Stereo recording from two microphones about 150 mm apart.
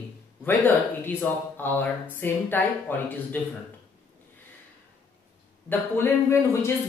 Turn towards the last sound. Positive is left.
turn(degrees=15)  # may be behind; listen again after turning